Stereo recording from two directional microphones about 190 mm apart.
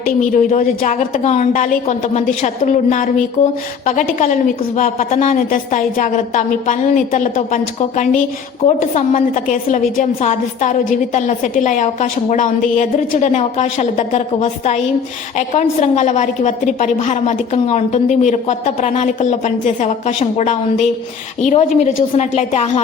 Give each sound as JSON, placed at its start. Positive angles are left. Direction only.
{"t": 0.0, "sound": "a woman's voice", "side_deg": 45}
{"t": 4.2, "sound": "a woman's voice", "side_deg": 45}